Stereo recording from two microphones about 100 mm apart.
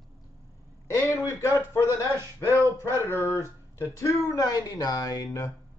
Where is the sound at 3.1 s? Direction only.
30° left (ahead or behind).